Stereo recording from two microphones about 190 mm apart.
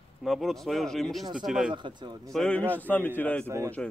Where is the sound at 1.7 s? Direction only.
25° right (ahead or behind).